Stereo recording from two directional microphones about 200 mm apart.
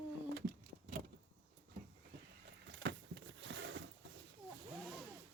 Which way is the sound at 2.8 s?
65° right (ahead or behind).